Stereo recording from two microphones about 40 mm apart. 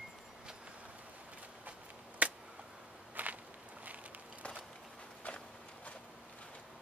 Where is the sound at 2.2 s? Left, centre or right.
Right.